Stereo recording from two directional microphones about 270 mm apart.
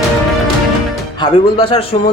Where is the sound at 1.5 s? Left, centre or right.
Centre.